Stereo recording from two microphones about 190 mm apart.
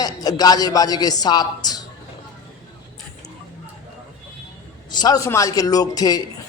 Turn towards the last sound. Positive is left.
turn(degrees=20)  # may be behind; listen again after turning